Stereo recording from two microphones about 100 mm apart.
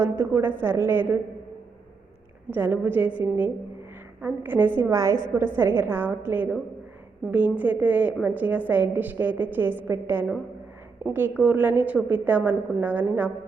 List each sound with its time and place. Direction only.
0.0 s a woman's voice: 25° right (ahead or behind)
2.5 s a woman's voice: 20° right (ahead or behind)
4.8 s a woman's voice: 30° right (ahead or behind)